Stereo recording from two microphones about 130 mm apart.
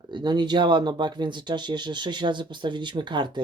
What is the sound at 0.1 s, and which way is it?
Speech, 35° right (ahead or behind).